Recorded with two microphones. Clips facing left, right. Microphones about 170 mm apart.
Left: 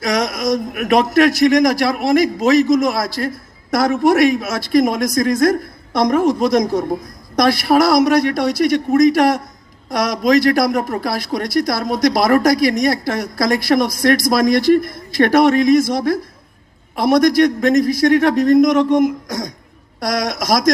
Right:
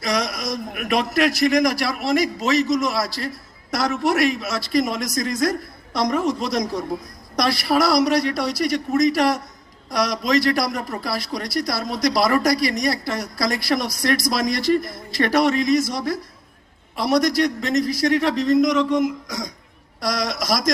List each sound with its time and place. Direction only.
0.0 s a man's voice: 50° left (ahead or behind)
20.0 s a man's voice: 50° left (ahead or behind)